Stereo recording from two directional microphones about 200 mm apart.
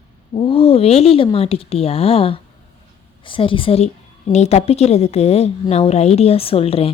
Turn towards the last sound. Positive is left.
turn(degrees=30)  # may be behind; listen again after turning